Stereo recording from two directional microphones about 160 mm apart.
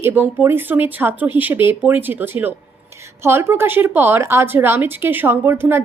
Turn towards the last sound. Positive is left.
turn(degrees=-15)  # may be behind; listen again after turning